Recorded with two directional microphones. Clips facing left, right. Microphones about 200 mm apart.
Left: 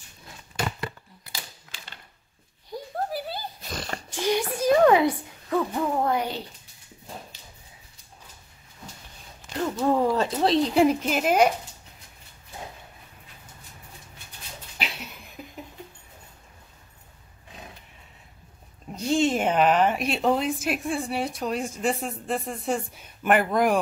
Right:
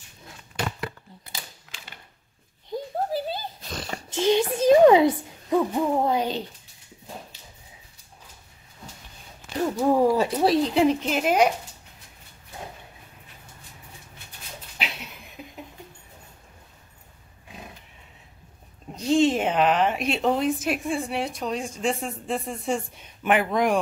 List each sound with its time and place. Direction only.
1.7 s typewriter: centre (ahead or behind)
2.7 s a sound: 20° right (ahead or behind)
3.7 s a sound: 5° right (ahead or behind)
4.1 s speech: 20° right (ahead or behind)
9.6 s speech: 10° right (ahead or behind)
10.7 s a woman's voice: centre (ahead or behind)
18.9 s a woman's voice: centre (ahead or behind)